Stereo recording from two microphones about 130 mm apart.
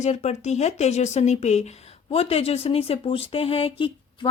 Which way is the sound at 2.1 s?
50° left (ahead or behind).